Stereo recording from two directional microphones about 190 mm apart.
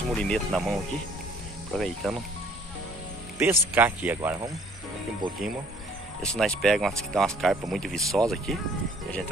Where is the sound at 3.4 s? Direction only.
10° right (ahead or behind).